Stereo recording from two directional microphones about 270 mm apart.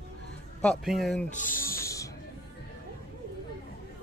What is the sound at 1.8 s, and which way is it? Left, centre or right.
Snake, centre.